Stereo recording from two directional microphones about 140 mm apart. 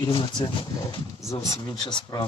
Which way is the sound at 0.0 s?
35° left (ahead or behind).